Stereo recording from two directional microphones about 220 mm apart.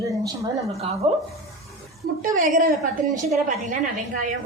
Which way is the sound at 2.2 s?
40° right (ahead or behind).